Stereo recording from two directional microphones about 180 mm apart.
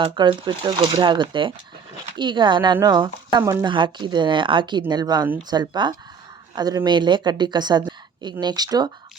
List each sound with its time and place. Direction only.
0.0 s a woman's voice: 25° right (ahead or behind)